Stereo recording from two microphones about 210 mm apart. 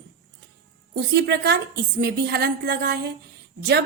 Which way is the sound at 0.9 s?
50° right (ahead or behind).